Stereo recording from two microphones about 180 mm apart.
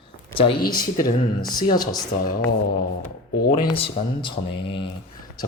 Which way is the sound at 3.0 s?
55° left (ahead or behind).